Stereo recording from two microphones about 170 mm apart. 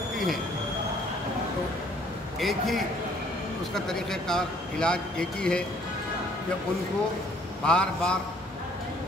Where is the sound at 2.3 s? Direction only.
Centre (ahead or behind).